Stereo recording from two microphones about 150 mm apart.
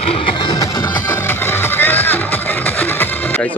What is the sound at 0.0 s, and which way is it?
Music, 35° left (ahead or behind).